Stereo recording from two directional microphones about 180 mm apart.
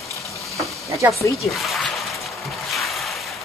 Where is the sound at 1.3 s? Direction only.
Centre (ahead or behind).